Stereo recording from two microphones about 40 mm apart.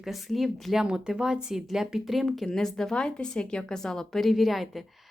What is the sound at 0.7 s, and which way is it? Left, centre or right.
Speech, centre.